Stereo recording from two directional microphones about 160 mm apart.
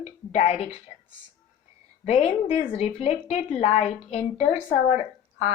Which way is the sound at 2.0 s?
40° left (ahead or behind).